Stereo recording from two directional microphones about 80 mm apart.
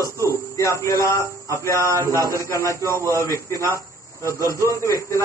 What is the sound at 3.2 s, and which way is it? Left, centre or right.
Speech, left.